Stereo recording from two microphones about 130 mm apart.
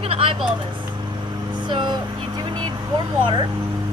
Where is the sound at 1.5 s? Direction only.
35° right (ahead or behind).